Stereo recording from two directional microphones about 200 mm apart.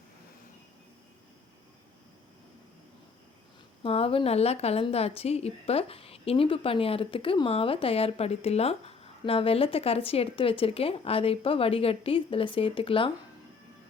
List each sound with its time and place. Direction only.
3.8 s a woman's voice: 30° left (ahead or behind)